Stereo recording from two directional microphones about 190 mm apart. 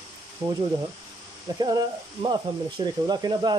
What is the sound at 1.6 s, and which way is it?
Speech, 20° right (ahead or behind).